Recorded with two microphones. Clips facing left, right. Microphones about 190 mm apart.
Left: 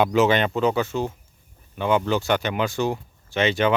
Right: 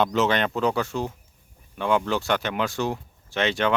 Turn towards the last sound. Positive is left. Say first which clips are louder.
# left 3 dB
turn(degrees=0)  # may be behind; listen again after turning